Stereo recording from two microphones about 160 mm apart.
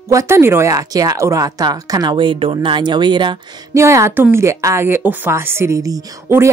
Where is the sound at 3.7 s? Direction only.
15° right (ahead or behind).